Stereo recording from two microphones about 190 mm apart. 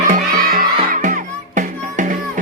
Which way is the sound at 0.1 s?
50° right (ahead or behind).